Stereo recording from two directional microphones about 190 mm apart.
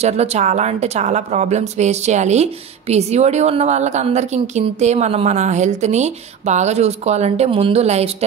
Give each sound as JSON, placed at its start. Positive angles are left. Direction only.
{"t": 0.0, "sound": "a woman's voice", "side_deg": -35}